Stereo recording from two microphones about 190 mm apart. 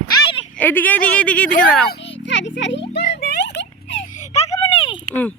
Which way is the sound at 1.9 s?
70° left (ahead or behind).